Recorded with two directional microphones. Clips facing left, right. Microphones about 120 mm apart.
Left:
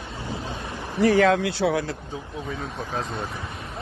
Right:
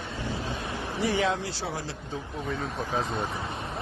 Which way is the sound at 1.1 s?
60° left (ahead or behind).